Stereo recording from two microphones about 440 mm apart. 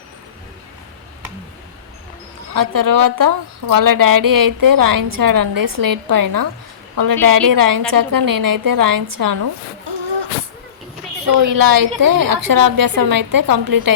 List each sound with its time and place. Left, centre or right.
2.5 s a woman's voice: right
11.4 s a woman's voice: right